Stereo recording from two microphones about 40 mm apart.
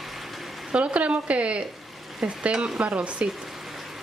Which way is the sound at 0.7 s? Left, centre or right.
Right.